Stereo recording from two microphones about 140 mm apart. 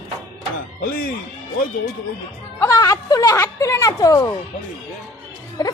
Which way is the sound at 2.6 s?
25° left (ahead or behind).